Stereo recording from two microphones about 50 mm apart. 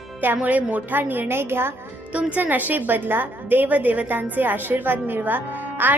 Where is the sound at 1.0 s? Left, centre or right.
Right.